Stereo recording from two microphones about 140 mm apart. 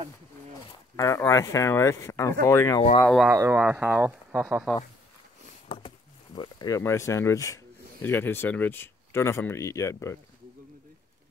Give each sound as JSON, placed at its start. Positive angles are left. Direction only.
{"t": 0.9, "sound": "speech", "side_deg": 20}
{"t": 3.3, "sound": "speech", "side_deg": -20}
{"t": 5.7, "sound": "a sound", "side_deg": 40}
{"t": 6.8, "sound": "speech", "side_deg": 20}